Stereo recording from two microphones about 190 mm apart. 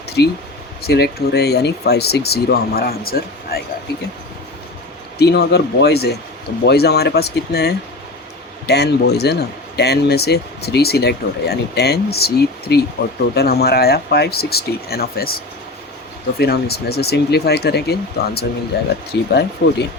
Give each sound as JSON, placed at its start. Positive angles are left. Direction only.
{"t": 0.8, "sound": "speech", "side_deg": 55}
{"t": 5.1, "sound": "speech", "side_deg": 60}
{"t": 16.4, "sound": "speech", "side_deg": 55}
{"t": 19.1, "sound": "speech", "side_deg": 70}